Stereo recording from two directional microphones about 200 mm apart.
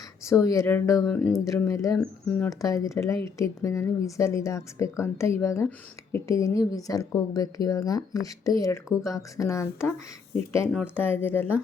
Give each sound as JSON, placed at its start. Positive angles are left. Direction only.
{"t": 0.3, "sound": "speech", "side_deg": 15}
{"t": 1.0, "sound": "speech", "side_deg": 5}
{"t": 1.3, "sound": "speech", "side_deg": 15}